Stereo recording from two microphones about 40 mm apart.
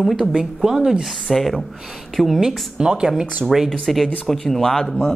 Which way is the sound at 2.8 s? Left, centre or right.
Centre.